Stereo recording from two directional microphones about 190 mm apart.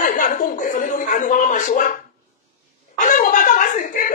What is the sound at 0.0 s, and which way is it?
Chuckle, 45° left (ahead or behind).